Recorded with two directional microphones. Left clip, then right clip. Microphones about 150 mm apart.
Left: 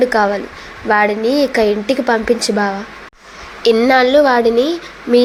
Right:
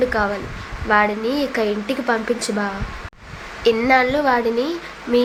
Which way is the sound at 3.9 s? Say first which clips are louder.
Left 6 dB; 30° left (ahead or behind).